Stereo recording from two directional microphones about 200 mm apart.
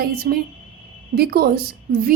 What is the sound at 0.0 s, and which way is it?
A woman's voice, 50° right (ahead or behind).